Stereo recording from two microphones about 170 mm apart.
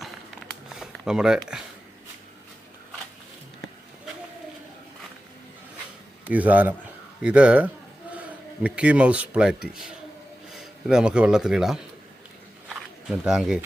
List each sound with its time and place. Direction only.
0.8 s speech: 5° right (ahead or behind)
6.2 s speech: 10° right (ahead or behind)
12.6 s a sound: 5° right (ahead or behind)